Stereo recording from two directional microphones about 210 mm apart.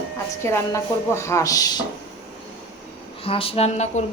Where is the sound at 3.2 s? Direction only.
25° left (ahead or behind).